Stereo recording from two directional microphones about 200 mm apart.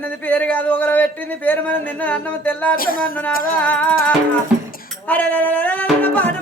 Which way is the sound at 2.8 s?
45° left (ahead or behind).